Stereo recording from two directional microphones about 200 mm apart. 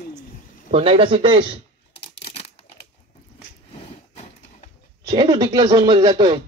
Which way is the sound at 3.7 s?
30° left (ahead or behind).